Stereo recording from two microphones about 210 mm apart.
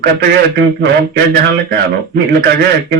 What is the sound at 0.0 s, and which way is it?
A man's voice, 50° right (ahead or behind).